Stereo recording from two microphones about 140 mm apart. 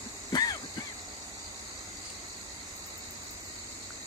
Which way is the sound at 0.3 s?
30° left (ahead or behind).